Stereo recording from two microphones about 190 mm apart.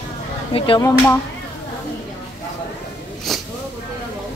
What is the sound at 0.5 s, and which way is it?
Speech, 25° left (ahead or behind).